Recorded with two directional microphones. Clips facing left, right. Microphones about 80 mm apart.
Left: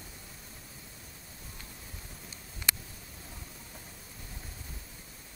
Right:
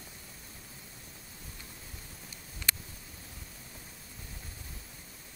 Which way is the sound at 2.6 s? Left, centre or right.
Centre.